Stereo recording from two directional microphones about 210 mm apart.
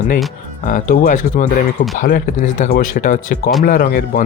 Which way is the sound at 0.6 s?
40° left (ahead or behind).